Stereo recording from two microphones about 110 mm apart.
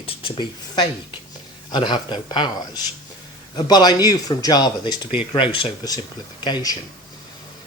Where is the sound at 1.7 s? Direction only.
45° left (ahead or behind).